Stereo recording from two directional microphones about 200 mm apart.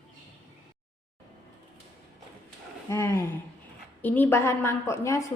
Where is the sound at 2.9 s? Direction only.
15° left (ahead or behind).